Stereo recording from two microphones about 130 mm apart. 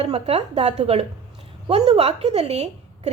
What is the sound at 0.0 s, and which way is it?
A woman's voice, 55° right (ahead or behind).